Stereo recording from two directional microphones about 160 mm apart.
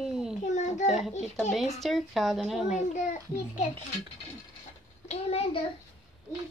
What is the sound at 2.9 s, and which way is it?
Speech, 50° left (ahead or behind).